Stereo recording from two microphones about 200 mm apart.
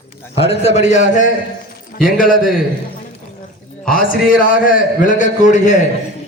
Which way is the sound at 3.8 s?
45° left (ahead or behind).